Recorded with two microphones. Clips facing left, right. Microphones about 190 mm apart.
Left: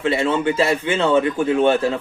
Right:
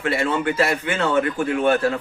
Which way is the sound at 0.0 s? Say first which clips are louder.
Left 3 dB; 25° left (ahead or behind).